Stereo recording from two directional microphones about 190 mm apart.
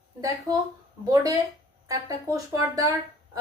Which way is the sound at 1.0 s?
15° right (ahead or behind).